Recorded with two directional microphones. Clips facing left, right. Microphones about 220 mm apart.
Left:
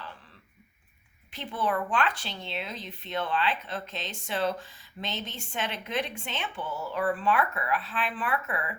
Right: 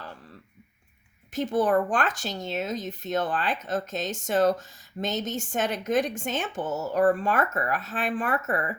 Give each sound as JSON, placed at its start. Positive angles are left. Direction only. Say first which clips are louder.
{"t": 1.3, "sound": "speech", "louder": "right 8 dB", "side_deg": -45}